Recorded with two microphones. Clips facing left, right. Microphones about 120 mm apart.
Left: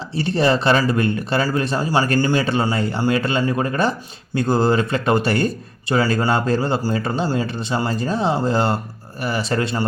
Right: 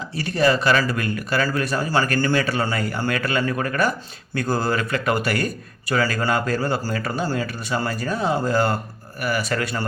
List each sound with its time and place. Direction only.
0.2 s a man's voice: 30° left (ahead or behind)